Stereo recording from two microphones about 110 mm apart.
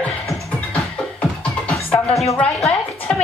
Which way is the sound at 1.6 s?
5° left (ahead or behind).